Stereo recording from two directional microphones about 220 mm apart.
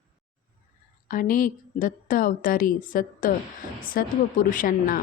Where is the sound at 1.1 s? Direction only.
35° left (ahead or behind).